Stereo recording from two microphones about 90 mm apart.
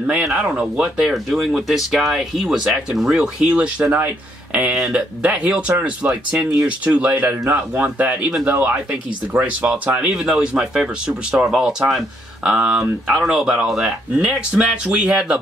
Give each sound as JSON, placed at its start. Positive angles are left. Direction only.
{"t": 0.2, "sound": "speech", "side_deg": -5}
{"t": 10.0, "sound": "speech", "side_deg": -5}
{"t": 14.1, "sound": "speech", "side_deg": -15}